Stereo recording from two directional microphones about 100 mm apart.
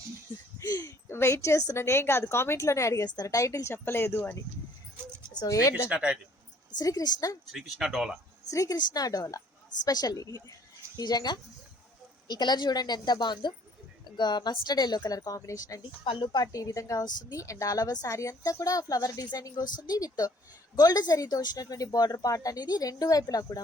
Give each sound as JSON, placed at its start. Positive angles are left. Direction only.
{"t": 0.6, "sound": "a sound", "side_deg": 35}
{"t": 1.0, "sound": "a woman's voice", "side_deg": 25}
{"t": 5.3, "sound": "speech", "side_deg": 40}
{"t": 5.9, "sound": "speech", "side_deg": -10}
{"t": 6.7, "sound": "a woman's voice", "side_deg": 40}
{"t": 7.5, "sound": "speech", "side_deg": -5}
{"t": 8.4, "sound": "a woman's voice", "side_deg": 35}
{"t": 16.0, "sound": "a woman's voice", "side_deg": 55}
{"t": 16.4, "sound": "a woman's voice", "side_deg": 35}